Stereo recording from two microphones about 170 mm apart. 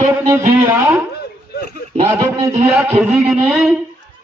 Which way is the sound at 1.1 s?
65° left (ahead or behind).